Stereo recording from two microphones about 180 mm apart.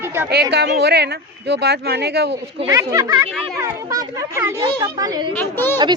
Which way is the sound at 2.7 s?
20° right (ahead or behind).